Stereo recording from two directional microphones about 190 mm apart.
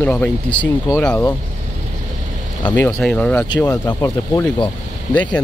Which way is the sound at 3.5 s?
20° left (ahead or behind).